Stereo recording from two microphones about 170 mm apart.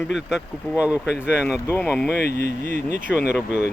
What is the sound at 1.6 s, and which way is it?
Speech, 10° left (ahead or behind).